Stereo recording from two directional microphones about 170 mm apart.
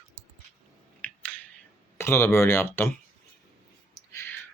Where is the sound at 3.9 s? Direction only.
15° left (ahead or behind).